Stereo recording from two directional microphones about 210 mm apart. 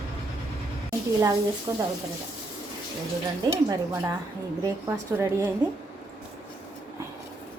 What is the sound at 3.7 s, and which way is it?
Speech, 15° right (ahead or behind).